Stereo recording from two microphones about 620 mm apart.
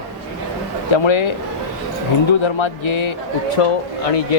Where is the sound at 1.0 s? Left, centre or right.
Left.